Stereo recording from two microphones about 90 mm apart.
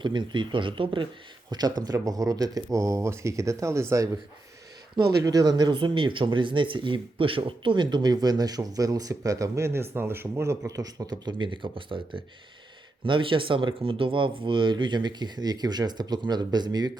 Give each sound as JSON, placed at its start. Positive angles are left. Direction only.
{"t": 0.0, "sound": "speech", "side_deg": -60}
{"t": 1.5, "sound": "speech", "side_deg": -50}